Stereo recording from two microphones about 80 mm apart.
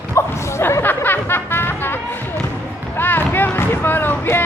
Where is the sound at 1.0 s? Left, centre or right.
Left.